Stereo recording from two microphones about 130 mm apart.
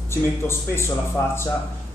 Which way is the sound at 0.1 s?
20° left (ahead or behind).